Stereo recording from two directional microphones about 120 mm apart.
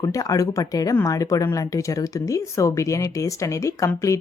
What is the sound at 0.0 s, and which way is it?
Speech, 30° left (ahead or behind).